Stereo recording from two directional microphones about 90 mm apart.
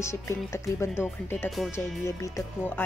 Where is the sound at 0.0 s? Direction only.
30° left (ahead or behind).